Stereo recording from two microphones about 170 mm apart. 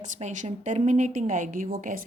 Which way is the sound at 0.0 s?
45° right (ahead or behind).